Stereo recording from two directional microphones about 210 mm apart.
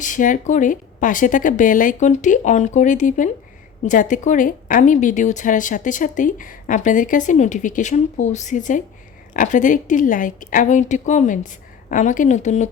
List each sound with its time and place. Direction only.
0.0 s a woman's voice: 40° left (ahead or behind)